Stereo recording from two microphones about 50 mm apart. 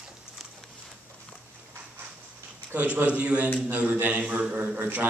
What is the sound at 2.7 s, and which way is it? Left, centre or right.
A man's voice, right.